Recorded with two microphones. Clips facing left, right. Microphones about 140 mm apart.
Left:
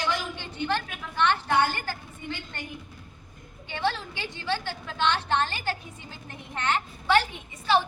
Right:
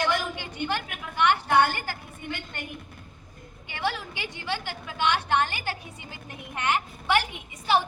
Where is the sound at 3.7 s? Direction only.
15° right (ahead or behind).